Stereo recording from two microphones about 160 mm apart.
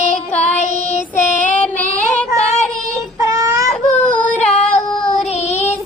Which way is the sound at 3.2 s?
20° right (ahead or behind).